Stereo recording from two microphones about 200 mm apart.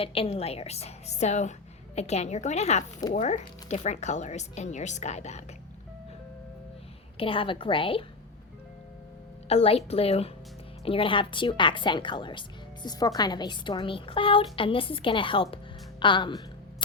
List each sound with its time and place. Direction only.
0.0 s speech: 30° left (ahead or behind)
7.2 s a woman's voice: 25° left (ahead or behind)
9.5 s a woman's voice: 30° left (ahead or behind)